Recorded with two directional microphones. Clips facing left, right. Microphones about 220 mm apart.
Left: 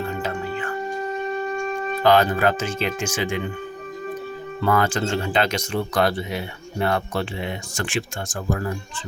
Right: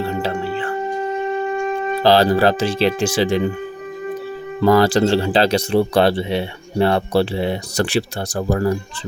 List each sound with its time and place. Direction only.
0.0 s music: 30° right (ahead or behind)
2.0 s speech: 35° right (ahead or behind)
4.6 s speech: 35° right (ahead or behind)